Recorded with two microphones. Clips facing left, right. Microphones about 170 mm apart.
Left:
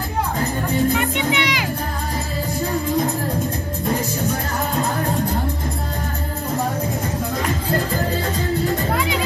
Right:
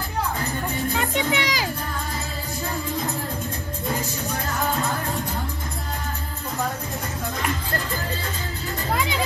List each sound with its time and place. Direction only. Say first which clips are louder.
0.9 s music: left 3 dB; 40° right (ahead or behind)